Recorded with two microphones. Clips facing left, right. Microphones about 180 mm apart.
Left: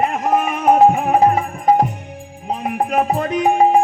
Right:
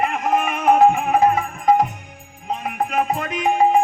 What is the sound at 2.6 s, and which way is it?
Music, 30° left (ahead or behind).